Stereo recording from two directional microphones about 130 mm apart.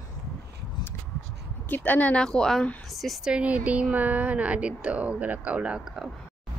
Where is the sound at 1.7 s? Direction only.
10° left (ahead or behind); by 6.0 s 5° right (ahead or behind).